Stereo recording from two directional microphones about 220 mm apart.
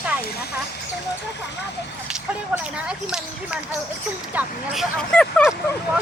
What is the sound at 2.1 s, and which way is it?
Speech, 5° right (ahead or behind).